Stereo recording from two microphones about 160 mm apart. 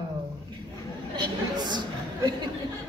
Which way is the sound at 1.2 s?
25° right (ahead or behind).